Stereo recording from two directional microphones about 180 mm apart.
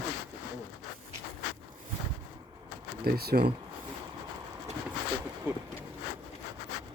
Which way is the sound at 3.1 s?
60° right (ahead or behind).